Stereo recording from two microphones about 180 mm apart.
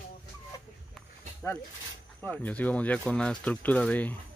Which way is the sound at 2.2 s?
10° left (ahead or behind).